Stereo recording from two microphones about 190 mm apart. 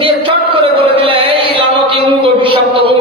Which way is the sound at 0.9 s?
30° right (ahead or behind).